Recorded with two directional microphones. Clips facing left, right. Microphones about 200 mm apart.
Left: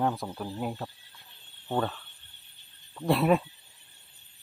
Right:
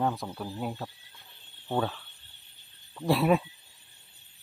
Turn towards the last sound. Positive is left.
turn(degrees=0)  # may be behind; listen again after turning